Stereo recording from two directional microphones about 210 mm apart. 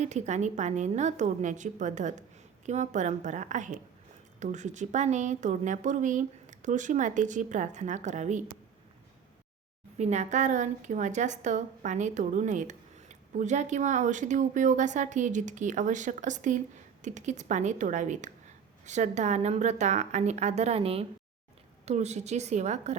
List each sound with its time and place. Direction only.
0.0 s a woman's voice: 35° right (ahead or behind)
10.0 s a woman's voice: 35° right (ahead or behind)